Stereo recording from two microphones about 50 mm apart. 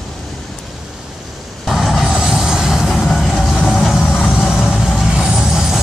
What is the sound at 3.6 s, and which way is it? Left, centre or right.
Vehicle, centre.